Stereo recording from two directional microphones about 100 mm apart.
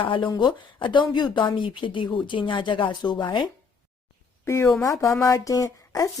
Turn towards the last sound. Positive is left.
turn(degrees=35)  # may be behind; listen again after turning